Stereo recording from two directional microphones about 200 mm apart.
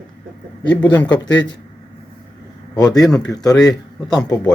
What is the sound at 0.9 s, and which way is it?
Speech, 10° left (ahead or behind).